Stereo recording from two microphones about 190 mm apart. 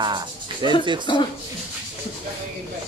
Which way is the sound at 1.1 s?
25° left (ahead or behind).